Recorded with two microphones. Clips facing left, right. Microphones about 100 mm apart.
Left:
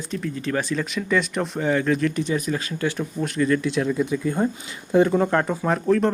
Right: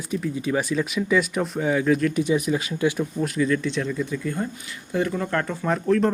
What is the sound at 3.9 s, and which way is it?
Speech, 20° left (ahead or behind).